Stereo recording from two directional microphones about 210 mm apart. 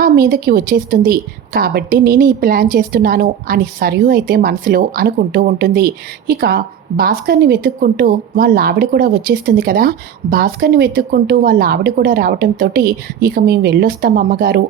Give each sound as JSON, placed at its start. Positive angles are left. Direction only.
{"t": 0.0, "sound": "speech", "side_deg": -45}